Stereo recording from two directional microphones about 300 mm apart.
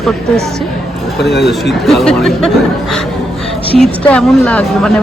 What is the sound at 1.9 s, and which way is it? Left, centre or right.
Speech, centre.